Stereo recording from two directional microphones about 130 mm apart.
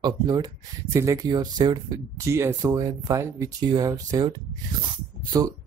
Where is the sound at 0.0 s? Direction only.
30° right (ahead or behind).